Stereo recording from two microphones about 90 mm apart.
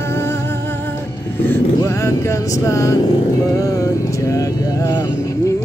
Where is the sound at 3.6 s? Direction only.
35° left (ahead or behind).